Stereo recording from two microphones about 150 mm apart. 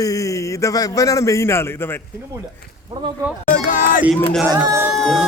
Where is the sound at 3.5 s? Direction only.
65° left (ahead or behind).